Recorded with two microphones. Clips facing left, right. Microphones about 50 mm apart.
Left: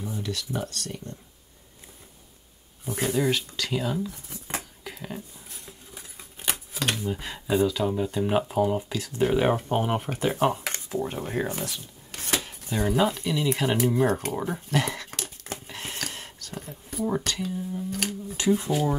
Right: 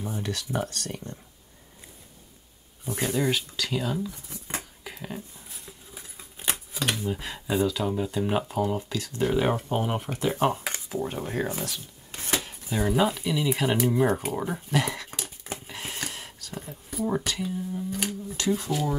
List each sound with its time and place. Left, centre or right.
0.0 s speech: right
3.0 s speech: centre
4.8 s scissors: centre
6.9 s speech: centre
12.1 s chopping: centre
12.4 s a sound: centre
18.6 s speech: left